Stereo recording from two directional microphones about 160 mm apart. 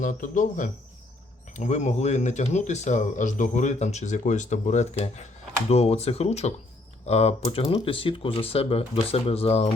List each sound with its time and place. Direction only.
0.0 s speech: 55° left (ahead or behind); by 9.6 s 40° left (ahead or behind)